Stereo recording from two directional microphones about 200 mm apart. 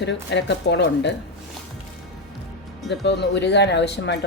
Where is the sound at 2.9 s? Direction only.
60° left (ahead or behind).